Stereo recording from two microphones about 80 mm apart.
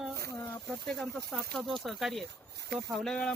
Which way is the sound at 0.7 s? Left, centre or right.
Centre.